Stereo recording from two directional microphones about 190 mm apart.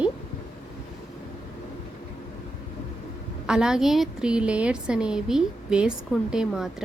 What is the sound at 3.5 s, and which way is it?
A woman's voice, 5° right (ahead or behind).